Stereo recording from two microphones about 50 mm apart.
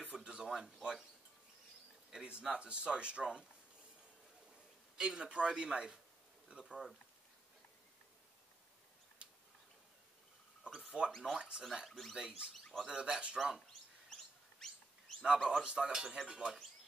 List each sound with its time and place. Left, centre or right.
0.1 s a sound: centre
2.4 s speech: centre
4.9 s speech: centre
6.6 s speech: centre
11.1 s speech: centre
11.3 s speech: centre
14.0 s chirp: centre
15.2 s speech: centre